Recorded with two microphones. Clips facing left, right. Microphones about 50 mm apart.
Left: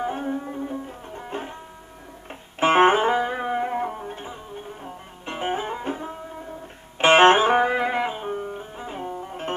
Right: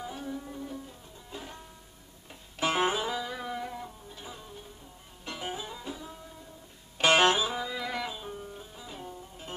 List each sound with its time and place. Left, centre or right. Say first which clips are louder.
0.0 s music: left 11 dB; left
1.1 s music: left 13 dB; left
2.6 s music: left 11 dB; left
3.8 s music: left 15 dB; left
4.2 s music: left 8 dB; left